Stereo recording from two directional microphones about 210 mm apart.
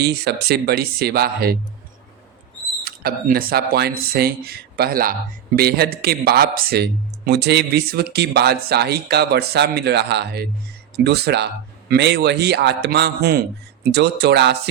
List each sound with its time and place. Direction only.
0.0 s speech: 50° right (ahead or behind)
2.8 s speech: 45° right (ahead or behind)